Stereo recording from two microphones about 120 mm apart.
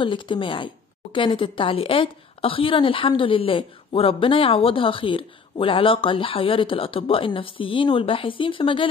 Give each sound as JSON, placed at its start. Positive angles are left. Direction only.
{"t": 0.0, "sound": "speech", "side_deg": 45}